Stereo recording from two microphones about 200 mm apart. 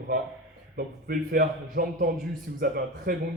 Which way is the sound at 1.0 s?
45° right (ahead or behind).